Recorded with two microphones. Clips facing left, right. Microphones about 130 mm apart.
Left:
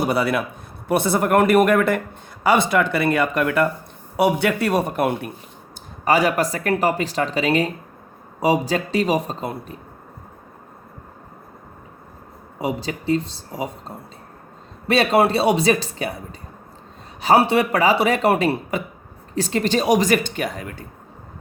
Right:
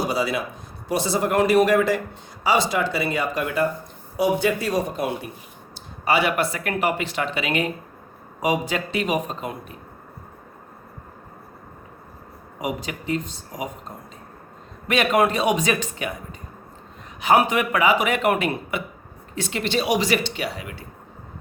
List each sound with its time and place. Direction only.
0.0 s a man's voice: 60° left (ahead or behind)
6.1 s speech: 40° left (ahead or behind)
12.5 s speech: 30° left (ahead or behind)